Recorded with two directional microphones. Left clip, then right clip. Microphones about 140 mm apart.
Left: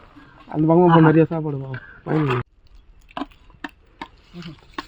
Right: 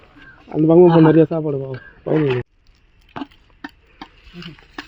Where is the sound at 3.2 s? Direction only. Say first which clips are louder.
Left 2 dB; 60° left (ahead or behind).